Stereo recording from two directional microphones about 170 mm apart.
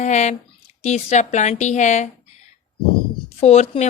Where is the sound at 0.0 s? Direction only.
45° left (ahead or behind).